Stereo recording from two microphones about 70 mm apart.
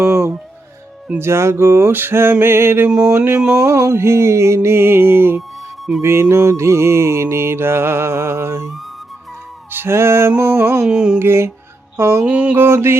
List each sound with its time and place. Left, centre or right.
0.0 s speech: right
1.2 s music: right
1.9 s music: right
2.9 s a sound: centre
3.6 s music: right
9.7 s music: right
10.8 s a sound: centre
11.2 s music: right
12.2 s a sound: centre
12.5 s music: right